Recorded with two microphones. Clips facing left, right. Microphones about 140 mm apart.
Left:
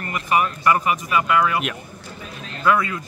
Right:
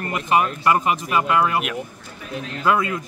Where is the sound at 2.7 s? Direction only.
20° right (ahead or behind).